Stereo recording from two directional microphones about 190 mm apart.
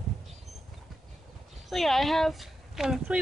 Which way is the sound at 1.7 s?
Centre (ahead or behind).